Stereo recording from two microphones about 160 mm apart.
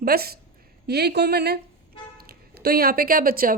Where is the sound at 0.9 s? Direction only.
90° right.